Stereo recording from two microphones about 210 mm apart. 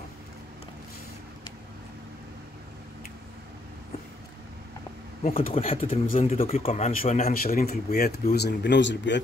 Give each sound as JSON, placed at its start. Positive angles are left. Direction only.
{"t": 5.3, "sound": "speech", "side_deg": 25}